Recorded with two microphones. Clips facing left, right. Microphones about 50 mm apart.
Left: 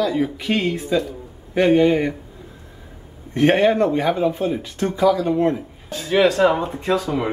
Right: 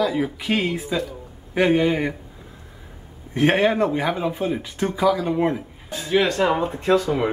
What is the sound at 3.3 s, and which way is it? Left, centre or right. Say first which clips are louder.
Speech: left 3 dB; centre.